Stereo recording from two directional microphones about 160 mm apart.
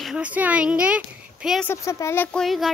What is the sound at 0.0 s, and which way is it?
A woman's voice, 5° right (ahead or behind).